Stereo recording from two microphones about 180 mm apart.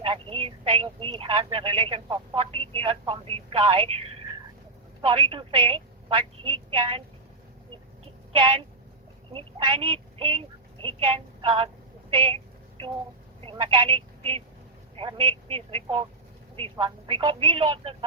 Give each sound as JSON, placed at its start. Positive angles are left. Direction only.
{"t": 0.0, "sound": "speech", "side_deg": -30}
{"t": 5.0, "sound": "speech", "side_deg": -30}
{"t": 9.3, "sound": "speech", "side_deg": -30}
{"t": 12.1, "sound": "a sound", "side_deg": -30}
{"t": 13.4, "sound": "a woman's voice", "side_deg": -25}